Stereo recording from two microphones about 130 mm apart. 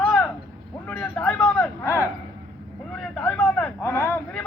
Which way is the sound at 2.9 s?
10° left (ahead or behind).